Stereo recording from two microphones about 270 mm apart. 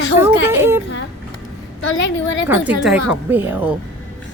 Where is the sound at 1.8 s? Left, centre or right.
Left.